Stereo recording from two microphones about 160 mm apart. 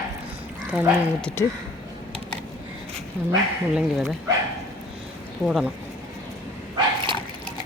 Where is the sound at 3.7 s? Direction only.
Centre (ahead or behind).